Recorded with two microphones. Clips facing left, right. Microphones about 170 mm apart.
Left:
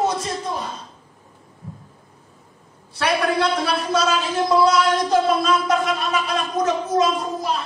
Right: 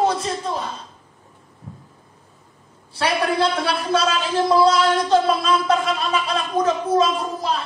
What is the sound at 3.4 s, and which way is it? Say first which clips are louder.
A man's voice: even; 30° right (ahead or behind).